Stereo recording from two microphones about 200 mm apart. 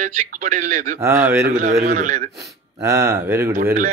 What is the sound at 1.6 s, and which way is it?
Speech, 35° right (ahead or behind).